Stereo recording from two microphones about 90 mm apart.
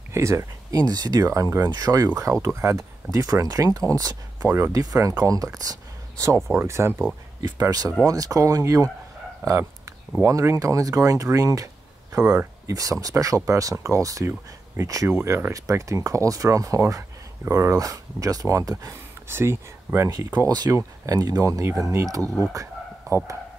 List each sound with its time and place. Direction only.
0.1 s speech: 30° right (ahead or behind)
7.6 s speech: 45° right (ahead or behind); by 20.1 s 25° right (ahead or behind)
20.1 s speech: 45° right (ahead or behind)
22.5 s a sound: 35° right (ahead or behind)